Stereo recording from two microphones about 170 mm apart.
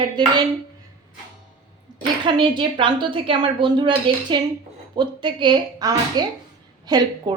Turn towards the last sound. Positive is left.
turn(degrees=-25)  # may be behind; listen again after turning